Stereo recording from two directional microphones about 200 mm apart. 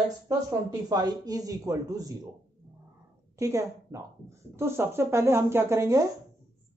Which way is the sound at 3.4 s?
15° right (ahead or behind).